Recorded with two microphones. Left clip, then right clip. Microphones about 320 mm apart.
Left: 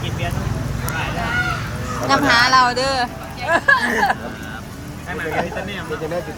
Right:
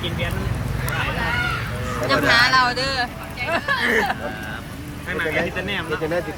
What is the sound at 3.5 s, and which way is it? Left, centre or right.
Speech, left.